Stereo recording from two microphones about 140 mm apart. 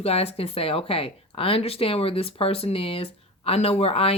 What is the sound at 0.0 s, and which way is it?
Speech, 45° left (ahead or behind).